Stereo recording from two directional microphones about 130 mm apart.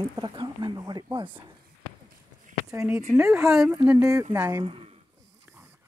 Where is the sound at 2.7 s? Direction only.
20° right (ahead or behind).